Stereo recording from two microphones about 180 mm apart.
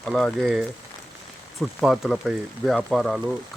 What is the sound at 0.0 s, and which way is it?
Speech, centre (ahead or behind).